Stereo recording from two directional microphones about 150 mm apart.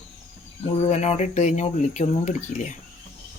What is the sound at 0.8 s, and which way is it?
Speech, 45° left (ahead or behind).